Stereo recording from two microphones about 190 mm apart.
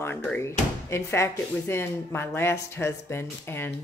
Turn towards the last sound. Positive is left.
turn(degrees=10)  # may be behind; listen again after turning